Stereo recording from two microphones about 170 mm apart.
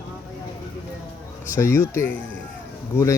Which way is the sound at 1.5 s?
15° left (ahead or behind).